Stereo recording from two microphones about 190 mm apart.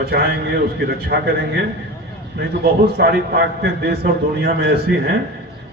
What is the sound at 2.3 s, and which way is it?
A man's voice, 55° right (ahead or behind).